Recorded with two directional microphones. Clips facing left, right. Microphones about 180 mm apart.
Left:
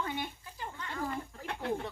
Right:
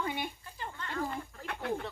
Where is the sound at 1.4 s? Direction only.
25° left (ahead or behind).